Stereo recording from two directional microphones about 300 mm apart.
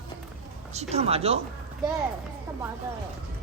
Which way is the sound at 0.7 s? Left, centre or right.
Right.